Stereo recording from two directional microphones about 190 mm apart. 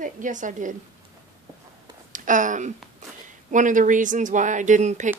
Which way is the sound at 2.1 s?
45° right (ahead or behind).